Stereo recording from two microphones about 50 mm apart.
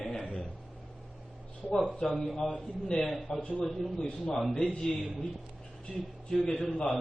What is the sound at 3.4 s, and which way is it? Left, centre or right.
Speech, left.